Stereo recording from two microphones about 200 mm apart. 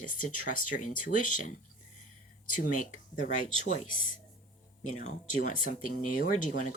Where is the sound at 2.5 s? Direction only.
40° left (ahead or behind).